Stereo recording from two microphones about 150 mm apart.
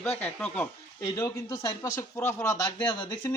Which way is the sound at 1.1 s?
20° left (ahead or behind).